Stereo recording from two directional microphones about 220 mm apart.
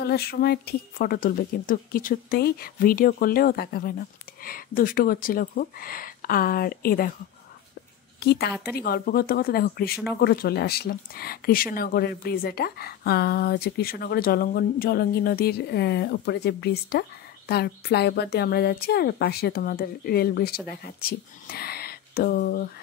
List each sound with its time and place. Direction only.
0.0 s speech: 45° left (ahead or behind)
8.2 s speech: 45° left (ahead or behind)